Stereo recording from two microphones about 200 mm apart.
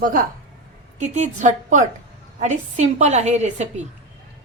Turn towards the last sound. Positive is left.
turn(degrees=-35)  # may be behind; listen again after turning